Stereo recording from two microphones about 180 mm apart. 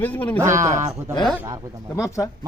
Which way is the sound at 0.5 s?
40° right (ahead or behind).